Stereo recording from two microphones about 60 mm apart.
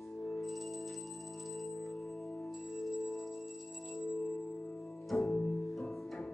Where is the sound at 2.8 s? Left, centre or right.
Centre.